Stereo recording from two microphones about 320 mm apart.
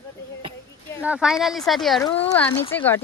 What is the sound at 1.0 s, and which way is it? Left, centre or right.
Speech, centre.